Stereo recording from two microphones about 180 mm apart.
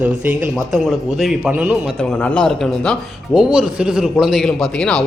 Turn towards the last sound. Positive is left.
turn(degrees=5)  # may be behind; listen again after turning